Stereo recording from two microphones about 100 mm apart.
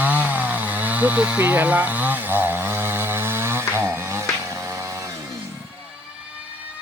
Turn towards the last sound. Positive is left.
turn(degrees=-30)  # may be behind; listen again after turning